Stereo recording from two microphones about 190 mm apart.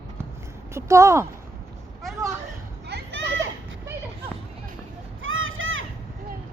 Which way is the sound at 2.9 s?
80° right.